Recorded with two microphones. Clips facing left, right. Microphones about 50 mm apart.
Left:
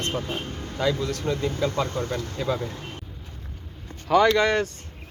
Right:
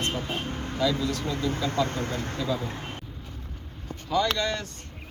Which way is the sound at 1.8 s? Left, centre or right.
Right.